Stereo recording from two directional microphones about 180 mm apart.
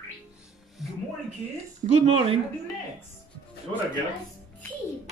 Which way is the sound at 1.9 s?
35° right (ahead or behind).